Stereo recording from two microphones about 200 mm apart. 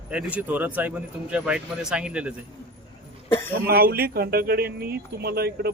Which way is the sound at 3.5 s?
50° right (ahead or behind).